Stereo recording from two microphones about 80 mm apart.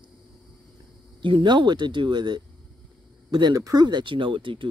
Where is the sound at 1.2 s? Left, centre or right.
Right.